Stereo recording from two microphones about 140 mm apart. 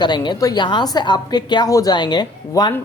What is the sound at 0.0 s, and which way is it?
A woman's voice, 30° left (ahead or behind).